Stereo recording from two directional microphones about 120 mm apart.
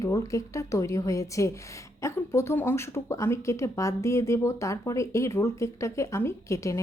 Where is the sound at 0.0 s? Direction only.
25° left (ahead or behind).